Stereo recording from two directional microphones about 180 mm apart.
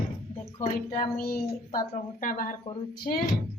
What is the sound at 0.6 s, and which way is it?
Speech, 45° left (ahead or behind).